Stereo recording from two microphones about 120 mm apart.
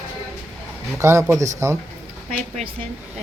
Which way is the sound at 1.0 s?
20° right (ahead or behind).